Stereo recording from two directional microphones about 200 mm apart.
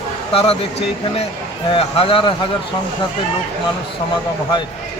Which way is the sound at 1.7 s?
30° left (ahead or behind).